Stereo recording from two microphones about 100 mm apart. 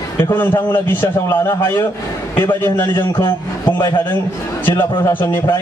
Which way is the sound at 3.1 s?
50° left (ahead or behind).